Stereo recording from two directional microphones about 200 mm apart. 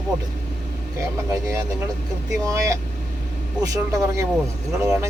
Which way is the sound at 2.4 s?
15° right (ahead or behind).